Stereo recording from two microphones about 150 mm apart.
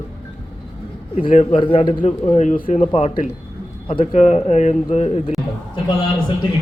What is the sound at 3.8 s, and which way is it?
Speech, 40° left (ahead or behind).